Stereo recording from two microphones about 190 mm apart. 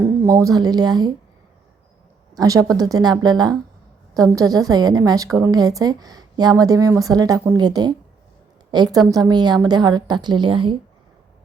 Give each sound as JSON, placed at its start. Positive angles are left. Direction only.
{"t": 0.0, "sound": "speech", "side_deg": -15}
{"t": 2.3, "sound": "a woman's voice", "side_deg": -20}